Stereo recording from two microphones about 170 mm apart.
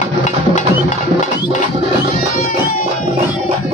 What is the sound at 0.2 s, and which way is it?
Music, 45° left (ahead or behind).